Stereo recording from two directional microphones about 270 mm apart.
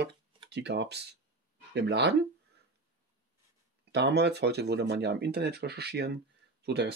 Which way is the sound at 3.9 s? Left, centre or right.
Right.